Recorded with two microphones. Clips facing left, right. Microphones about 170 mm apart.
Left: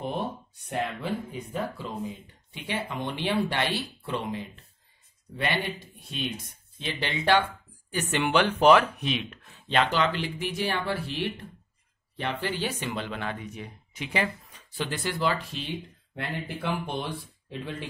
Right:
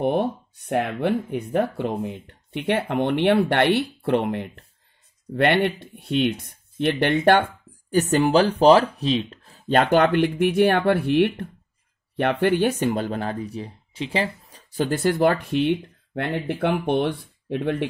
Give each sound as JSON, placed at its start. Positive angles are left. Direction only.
{"t": 0.0, "sound": "speech", "side_deg": -65}
{"t": 7.9, "sound": "speech", "side_deg": -40}